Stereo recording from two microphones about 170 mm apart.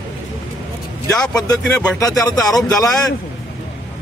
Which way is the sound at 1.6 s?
5° left (ahead or behind).